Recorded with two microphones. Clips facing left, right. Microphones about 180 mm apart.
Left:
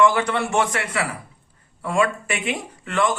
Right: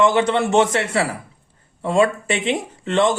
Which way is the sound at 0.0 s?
25° right (ahead or behind).